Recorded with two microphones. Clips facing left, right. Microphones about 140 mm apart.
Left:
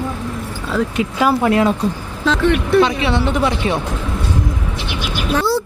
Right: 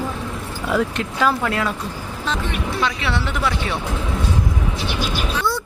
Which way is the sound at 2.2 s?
80° left.